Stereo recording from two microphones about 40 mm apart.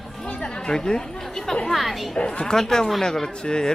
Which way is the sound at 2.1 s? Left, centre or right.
Left.